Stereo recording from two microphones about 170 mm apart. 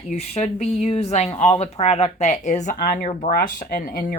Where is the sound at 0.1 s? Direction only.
40° left (ahead or behind).